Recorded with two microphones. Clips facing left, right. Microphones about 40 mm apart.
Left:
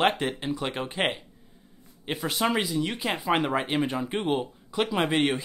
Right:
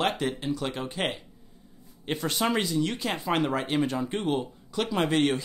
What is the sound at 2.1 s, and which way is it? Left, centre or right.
Speech, centre.